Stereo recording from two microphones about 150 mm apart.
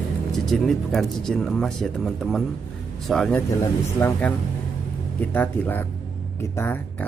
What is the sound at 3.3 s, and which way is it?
Speech, 15° left (ahead or behind).